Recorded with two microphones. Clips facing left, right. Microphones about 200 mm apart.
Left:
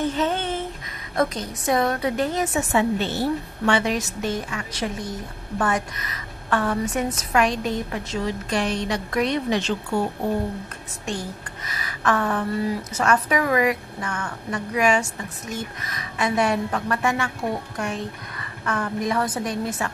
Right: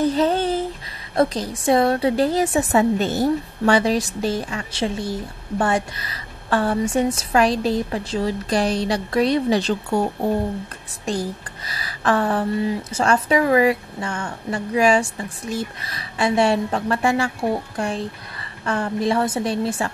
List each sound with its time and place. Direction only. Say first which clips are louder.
0.0 s a sound: right 5 dB; 35° right (ahead or behind)
1.1 s a woman's voice: right 4 dB; 30° right (ahead or behind)
11.1 s a woman's voice: right 5 dB; 35° right (ahead or behind)